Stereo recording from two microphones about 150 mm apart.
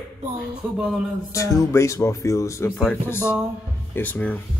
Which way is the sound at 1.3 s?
20° left (ahead or behind).